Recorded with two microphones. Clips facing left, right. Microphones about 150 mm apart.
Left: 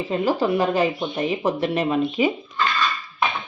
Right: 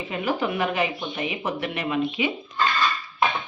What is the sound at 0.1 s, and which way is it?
Speech, 35° left (ahead or behind).